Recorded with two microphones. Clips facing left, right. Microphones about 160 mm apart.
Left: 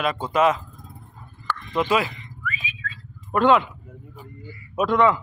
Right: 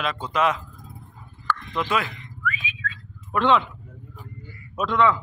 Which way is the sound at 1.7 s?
20° left (ahead or behind).